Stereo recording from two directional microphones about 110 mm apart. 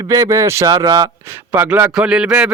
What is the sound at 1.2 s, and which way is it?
Speech, 20° right (ahead or behind).